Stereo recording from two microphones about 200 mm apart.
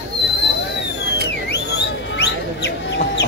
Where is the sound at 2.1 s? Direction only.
55° left (ahead or behind).